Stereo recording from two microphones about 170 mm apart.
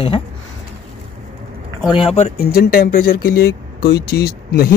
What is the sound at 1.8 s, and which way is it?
Speech, 35° left (ahead or behind).